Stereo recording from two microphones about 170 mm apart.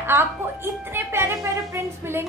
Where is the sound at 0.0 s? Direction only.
15° right (ahead or behind).